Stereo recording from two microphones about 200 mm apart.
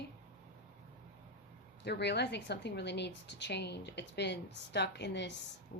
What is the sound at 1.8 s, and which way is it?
A woman's voice, 60° left (ahead or behind).